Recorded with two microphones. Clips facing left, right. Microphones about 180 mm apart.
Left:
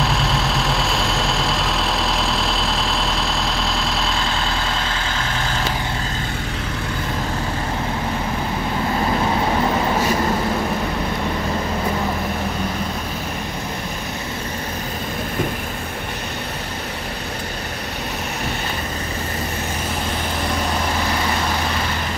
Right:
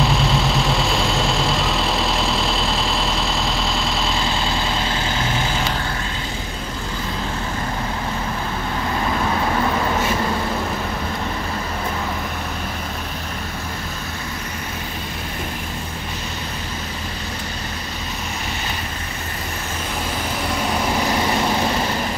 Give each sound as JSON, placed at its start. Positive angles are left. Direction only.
{"t": 0.0, "sound": "vehicle", "side_deg": 0}